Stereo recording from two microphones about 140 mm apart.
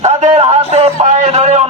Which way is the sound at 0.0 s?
50° right (ahead or behind).